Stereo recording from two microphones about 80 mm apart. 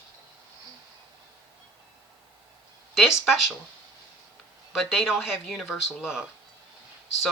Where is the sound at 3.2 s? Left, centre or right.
Centre.